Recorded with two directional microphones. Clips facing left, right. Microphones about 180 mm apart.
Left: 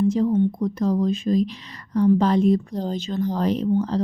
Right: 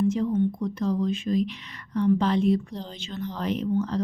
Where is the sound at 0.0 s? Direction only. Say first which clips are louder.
Left 4 dB; 35° left (ahead or behind).